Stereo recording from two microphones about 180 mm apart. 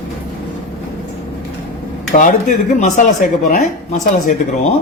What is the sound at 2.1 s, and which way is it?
Speech, 45° left (ahead or behind).